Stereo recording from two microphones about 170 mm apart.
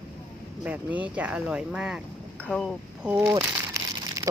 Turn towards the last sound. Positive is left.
turn(degrees=-20)  # may be behind; listen again after turning